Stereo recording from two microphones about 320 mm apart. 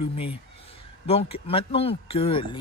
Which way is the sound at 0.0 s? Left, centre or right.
Centre.